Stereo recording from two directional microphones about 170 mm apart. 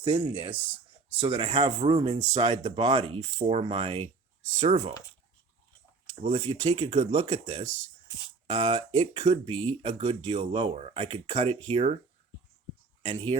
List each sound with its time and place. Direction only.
0.0 s speech: 30° right (ahead or behind)
0.5 s speech: 10° right (ahead or behind)
1.1 s speech: 30° right (ahead or behind)
6.2 s speech: 35° right (ahead or behind)